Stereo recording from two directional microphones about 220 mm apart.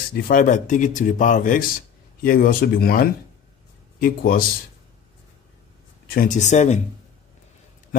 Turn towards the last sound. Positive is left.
turn(degrees=30)  # may be behind; listen again after turning